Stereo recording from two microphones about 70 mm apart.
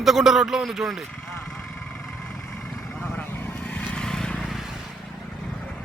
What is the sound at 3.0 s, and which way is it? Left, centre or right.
Vehicle, left.